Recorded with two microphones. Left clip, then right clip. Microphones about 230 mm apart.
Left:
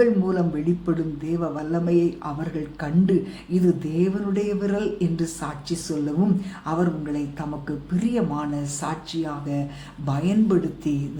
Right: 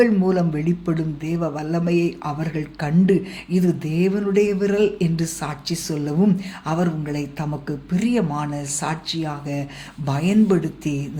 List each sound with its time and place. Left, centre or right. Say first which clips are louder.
0.0 s speech: right 2 dB; right